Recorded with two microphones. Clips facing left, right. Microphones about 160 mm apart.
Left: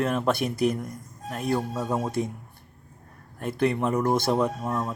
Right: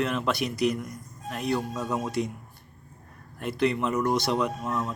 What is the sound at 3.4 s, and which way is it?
A man's voice, 50° left (ahead or behind).